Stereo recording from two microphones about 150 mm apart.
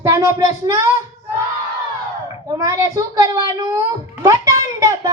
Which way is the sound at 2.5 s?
20° right (ahead or behind).